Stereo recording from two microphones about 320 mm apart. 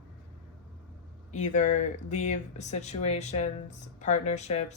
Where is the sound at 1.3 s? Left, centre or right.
Left.